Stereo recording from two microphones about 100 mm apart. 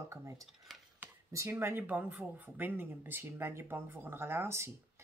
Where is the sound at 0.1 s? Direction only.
30° right (ahead or behind).